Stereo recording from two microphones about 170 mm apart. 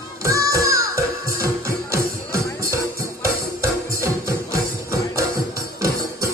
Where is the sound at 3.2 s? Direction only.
15° right (ahead or behind).